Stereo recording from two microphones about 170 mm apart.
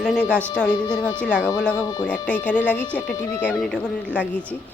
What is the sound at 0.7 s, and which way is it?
Speech, 25° left (ahead or behind).